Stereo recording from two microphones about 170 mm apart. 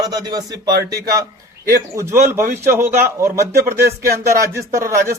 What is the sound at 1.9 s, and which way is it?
A man's voice, 15° right (ahead or behind).